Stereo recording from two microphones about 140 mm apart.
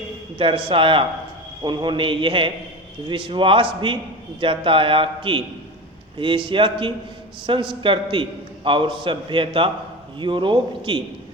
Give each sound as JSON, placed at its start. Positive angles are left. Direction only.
{"t": 0.3, "sound": "a man's voice", "side_deg": -40}